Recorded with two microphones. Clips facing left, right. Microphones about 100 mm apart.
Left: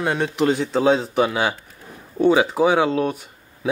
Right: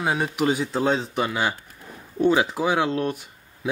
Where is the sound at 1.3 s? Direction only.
15° left (ahead or behind).